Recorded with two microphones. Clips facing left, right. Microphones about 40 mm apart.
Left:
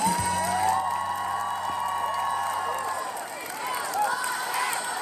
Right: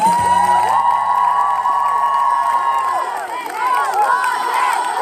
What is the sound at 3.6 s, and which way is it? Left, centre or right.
Crowd, right.